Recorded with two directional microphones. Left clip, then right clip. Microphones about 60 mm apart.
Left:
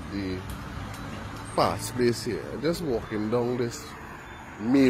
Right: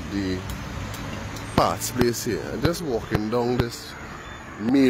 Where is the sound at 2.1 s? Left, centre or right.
Right.